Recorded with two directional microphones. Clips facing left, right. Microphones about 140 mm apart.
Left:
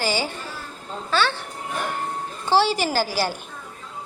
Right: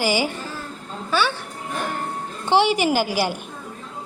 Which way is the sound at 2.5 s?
15° right (ahead or behind).